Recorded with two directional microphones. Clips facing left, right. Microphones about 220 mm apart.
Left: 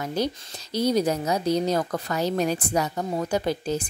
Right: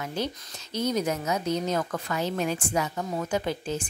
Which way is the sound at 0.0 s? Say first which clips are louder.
Left 4 dB; 40° left (ahead or behind).